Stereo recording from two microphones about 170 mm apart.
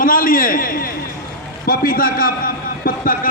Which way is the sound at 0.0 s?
55° left (ahead or behind).